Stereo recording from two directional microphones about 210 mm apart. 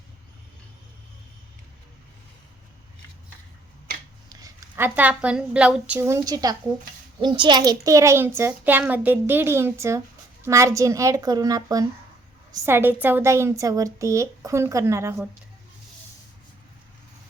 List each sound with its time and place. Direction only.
4.3 s a woman's voice: 15° right (ahead or behind)